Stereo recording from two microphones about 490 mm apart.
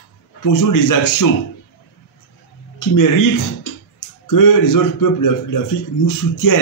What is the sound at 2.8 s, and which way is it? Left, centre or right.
A man's voice, left.